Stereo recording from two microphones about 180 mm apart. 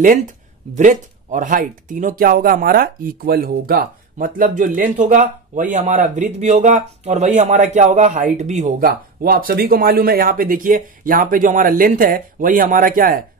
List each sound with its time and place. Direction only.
0.7 s speech: 45° right (ahead or behind)